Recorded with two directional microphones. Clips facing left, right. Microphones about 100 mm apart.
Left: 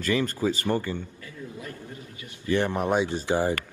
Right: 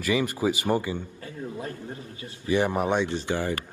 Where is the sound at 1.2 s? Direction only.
35° right (ahead or behind).